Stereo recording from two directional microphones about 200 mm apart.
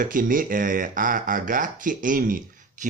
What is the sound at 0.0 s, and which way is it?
Speech, 45° right (ahead or behind).